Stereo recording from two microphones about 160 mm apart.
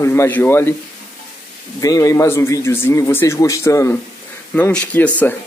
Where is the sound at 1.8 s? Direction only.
20° left (ahead or behind).